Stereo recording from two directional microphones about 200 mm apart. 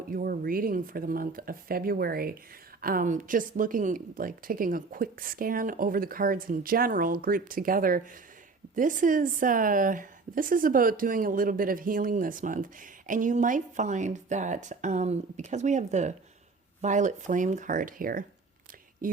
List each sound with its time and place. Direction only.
0.1 s a woman's voice: 45° right (ahead or behind)